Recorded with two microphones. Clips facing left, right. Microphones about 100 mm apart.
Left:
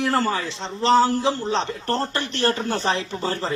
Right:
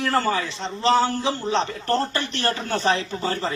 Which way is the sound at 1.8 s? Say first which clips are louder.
Right 1 dB; 30° left (ahead or behind).